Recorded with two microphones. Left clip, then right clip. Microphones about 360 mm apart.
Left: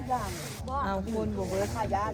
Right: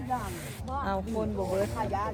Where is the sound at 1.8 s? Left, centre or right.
Left.